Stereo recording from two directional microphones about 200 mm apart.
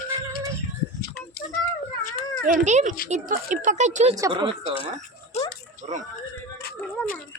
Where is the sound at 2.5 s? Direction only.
35° right (ahead or behind).